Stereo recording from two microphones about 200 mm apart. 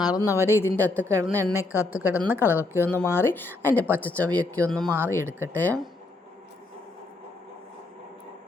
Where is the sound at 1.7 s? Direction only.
10° right (ahead or behind).